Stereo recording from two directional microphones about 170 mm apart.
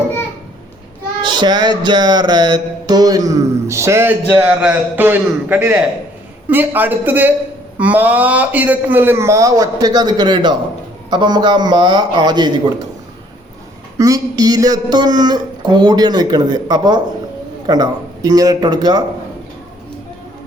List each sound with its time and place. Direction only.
1.2 s a man's voice: 25° right (ahead or behind)
14.0 s speech: 20° right (ahead or behind)